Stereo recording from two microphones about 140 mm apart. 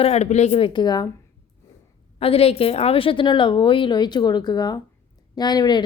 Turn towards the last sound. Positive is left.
turn(degrees=30)  # may be behind; listen again after turning